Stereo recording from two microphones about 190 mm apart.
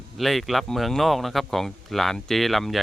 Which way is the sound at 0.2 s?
Centre (ahead or behind).